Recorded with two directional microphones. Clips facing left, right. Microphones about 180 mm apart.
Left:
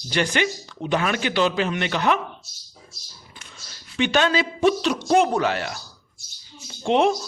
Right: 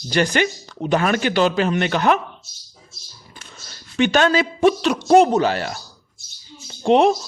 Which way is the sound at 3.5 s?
45° right (ahead or behind).